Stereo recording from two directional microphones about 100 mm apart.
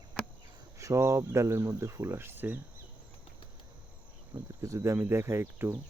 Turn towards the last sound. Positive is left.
turn(degrees=-25)  # may be behind; listen again after turning